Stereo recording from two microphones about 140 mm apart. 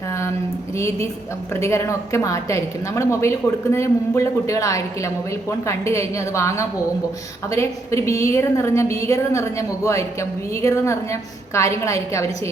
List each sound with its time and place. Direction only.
0.8 s a woman's voice: 20° left (ahead or behind)